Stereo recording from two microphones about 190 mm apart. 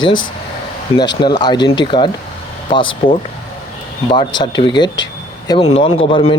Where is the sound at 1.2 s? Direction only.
25° left (ahead or behind).